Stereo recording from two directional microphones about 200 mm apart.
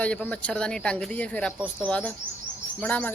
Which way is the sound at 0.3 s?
5° left (ahead or behind).